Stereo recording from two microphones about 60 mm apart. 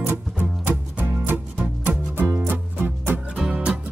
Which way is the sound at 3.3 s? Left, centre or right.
Centre.